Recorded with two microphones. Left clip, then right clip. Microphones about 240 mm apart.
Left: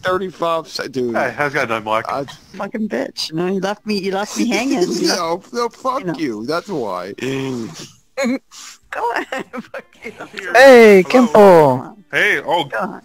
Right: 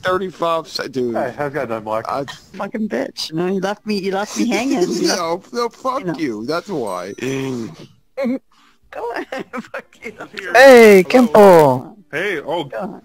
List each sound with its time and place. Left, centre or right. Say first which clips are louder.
0.0 s speech: even; centre
1.1 s speech: left 3 dB; left
2.5 s speech: even; centre
8.9 s speech: left 4 dB; left
9.5 s speech: right 1 dB; centre
12.1 s speech: left 6 dB; left